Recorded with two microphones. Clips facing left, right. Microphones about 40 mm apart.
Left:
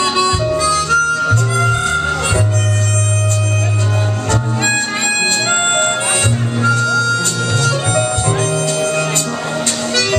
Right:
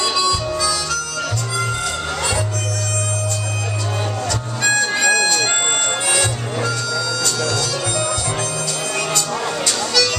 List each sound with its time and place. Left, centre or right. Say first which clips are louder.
0.0 s harmonica: left 4 dB; left
4.3 s music: left 4 dB; left